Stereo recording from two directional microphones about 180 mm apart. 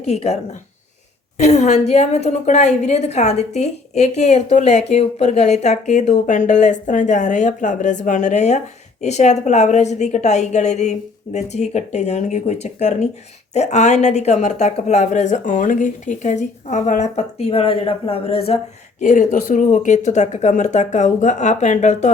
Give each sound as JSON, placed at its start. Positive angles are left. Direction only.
{"t": 0.0, "sound": "a woman's voice", "side_deg": 35}
{"t": 1.4, "sound": "a woman's voice", "side_deg": 40}